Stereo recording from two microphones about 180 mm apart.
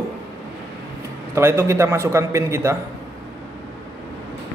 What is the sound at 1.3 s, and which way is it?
A man's voice, 15° right (ahead or behind).